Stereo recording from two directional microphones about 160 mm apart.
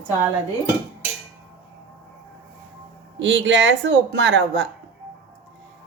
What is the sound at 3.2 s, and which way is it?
Speech, 90° right.